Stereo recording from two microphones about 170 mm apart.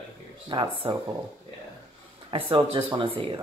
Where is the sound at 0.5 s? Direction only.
30° right (ahead or behind).